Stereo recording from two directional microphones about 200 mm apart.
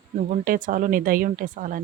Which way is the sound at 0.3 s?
40° right (ahead or behind).